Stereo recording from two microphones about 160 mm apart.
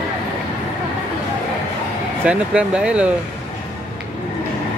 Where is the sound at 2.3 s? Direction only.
5° right (ahead or behind).